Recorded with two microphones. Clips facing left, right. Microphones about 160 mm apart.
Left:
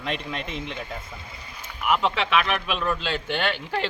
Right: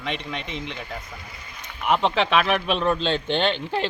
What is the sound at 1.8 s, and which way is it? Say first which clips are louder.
Speech: right 2 dB; 30° right (ahead or behind).